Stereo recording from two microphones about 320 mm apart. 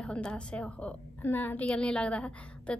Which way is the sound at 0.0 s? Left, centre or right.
Centre.